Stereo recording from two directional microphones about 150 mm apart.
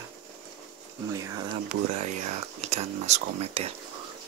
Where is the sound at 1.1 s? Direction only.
20° right (ahead or behind).